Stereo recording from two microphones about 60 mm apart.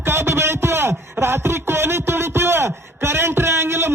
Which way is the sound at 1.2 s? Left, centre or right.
Right.